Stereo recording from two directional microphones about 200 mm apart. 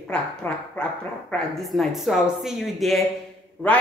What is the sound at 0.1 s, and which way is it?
A woman's voice, 5° left (ahead or behind).